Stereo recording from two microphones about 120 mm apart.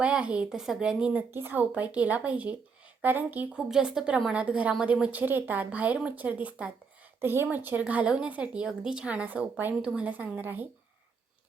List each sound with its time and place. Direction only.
0.0 s speech: 10° right (ahead or behind)